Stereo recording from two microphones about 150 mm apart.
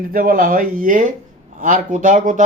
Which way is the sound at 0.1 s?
70° right (ahead or behind).